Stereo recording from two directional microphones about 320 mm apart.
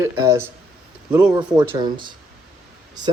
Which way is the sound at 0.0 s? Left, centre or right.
Centre.